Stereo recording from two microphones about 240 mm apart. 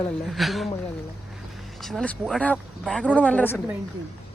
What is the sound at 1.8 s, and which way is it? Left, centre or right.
Speech, centre.